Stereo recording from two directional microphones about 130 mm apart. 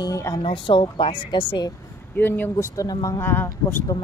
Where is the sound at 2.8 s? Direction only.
30° left (ahead or behind).